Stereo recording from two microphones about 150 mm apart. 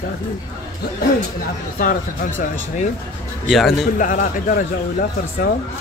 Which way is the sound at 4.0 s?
60° left (ahead or behind).